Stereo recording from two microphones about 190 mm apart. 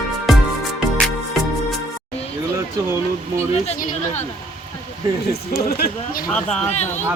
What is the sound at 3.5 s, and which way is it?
Speech, 35° left (ahead or behind).